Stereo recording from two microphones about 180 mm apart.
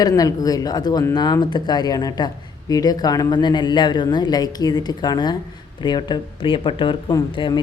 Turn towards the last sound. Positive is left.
turn(degrees=25)  # may be behind; listen again after turning